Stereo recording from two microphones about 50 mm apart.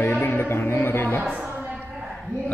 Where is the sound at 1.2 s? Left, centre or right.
Right.